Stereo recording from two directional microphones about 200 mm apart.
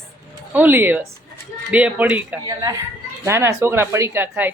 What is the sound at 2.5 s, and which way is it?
Speech, 20° right (ahead or behind).